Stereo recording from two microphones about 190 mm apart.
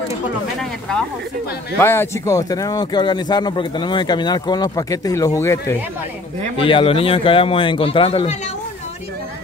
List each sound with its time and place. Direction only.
0.6 s speech: 5° left (ahead or behind)
6.6 s speech: 30° left (ahead or behind)